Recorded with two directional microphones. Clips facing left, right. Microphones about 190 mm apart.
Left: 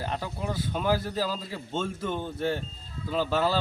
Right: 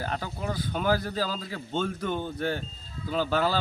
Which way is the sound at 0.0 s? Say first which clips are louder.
Even; centre (ahead or behind).